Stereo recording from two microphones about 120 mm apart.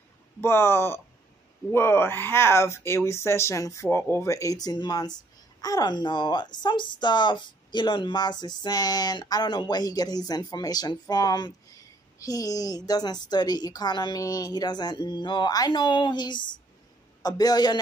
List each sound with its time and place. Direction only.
0.4 s speech: 20° left (ahead or behind); by 17.7 s 35° left (ahead or behind)